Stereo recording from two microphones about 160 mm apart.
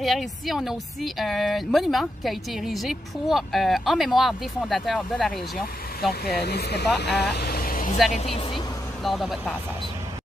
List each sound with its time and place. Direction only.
0.0 s speech: centre (ahead or behind)
6.2 s speech: 85° left
7.3 s vehicle: 75° left (ahead or behind); by 8.0 s 60° left (ahead or behind)
9.0 s speech: centre (ahead or behind)